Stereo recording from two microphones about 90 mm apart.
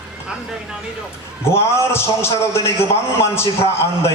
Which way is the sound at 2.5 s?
30° left (ahead or behind).